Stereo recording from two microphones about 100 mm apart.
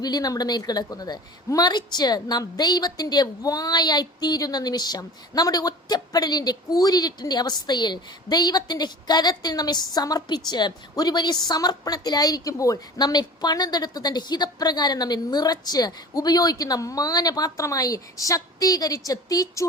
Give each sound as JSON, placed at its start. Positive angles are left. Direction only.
{"t": 0.0, "sound": "a woman's voice", "side_deg": 40}